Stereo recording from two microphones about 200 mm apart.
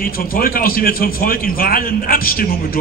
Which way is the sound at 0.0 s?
45° left (ahead or behind).